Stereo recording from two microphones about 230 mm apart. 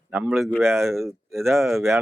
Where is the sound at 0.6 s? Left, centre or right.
Centre.